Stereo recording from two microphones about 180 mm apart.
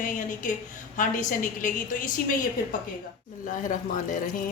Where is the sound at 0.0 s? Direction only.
45° left (ahead or behind).